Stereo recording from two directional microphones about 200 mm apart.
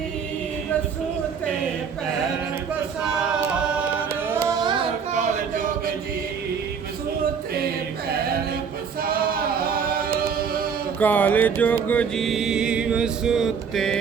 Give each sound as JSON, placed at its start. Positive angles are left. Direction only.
{"t": 3.0, "sound": "choir", "side_deg": -5}
{"t": 4.3, "sound": "carnatic music", "side_deg": -15}
{"t": 5.1, "sound": "a sound", "side_deg": -40}
{"t": 9.0, "sound": "music", "side_deg": -45}
{"t": 11.0, "sound": "mantra", "side_deg": 10}